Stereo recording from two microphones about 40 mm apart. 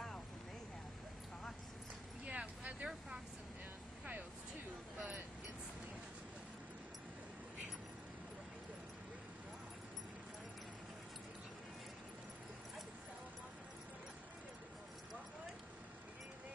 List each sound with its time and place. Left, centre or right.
2.2 s vehicle: right